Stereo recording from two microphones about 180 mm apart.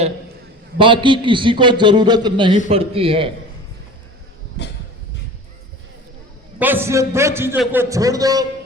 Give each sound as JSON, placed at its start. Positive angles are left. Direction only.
{"t": 0.8, "sound": "a man's voice", "side_deg": -25}
{"t": 6.6, "sound": "a man's voice", "side_deg": -10}